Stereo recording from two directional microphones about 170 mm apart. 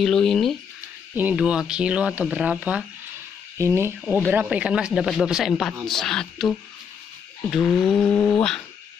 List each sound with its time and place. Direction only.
0.0 s speech: centre (ahead or behind); by 3.9 s 15° right (ahead or behind)
4.0 s speech: 5° right (ahead or behind)